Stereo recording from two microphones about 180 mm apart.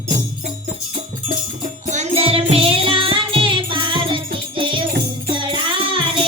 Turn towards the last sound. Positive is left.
turn(degrees=-25)  # may be behind; listen again after turning